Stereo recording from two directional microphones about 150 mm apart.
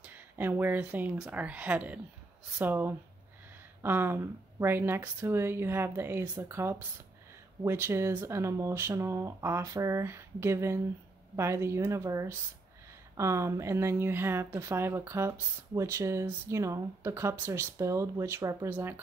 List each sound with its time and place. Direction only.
0.0 s speech: 10° right (ahead or behind)